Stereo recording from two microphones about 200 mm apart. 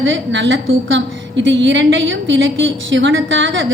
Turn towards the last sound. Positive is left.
turn(degrees=-70)  # may be behind; listen again after turning